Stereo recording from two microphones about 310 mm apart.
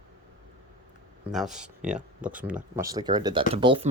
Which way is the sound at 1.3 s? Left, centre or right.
Centre.